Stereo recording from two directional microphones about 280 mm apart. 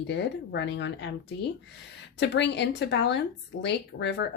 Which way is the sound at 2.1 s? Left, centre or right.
Left.